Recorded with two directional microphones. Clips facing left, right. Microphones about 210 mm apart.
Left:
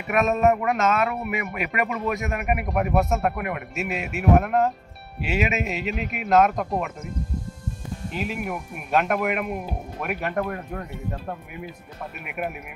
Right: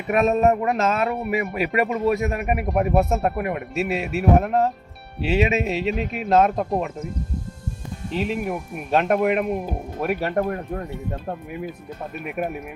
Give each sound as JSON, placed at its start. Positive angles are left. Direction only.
{"t": 0.1, "sound": "speech", "side_deg": -30}
{"t": 8.1, "sound": "speech", "side_deg": -30}